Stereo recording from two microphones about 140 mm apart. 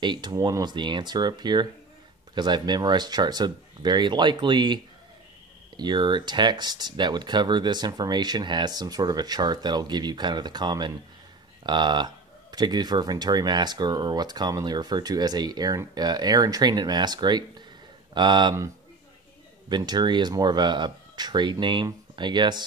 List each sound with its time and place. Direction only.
0.0 s speech: 30° right (ahead or behind)
5.8 s speech: 30° right (ahead or behind)
19.7 s speech: 30° right (ahead or behind)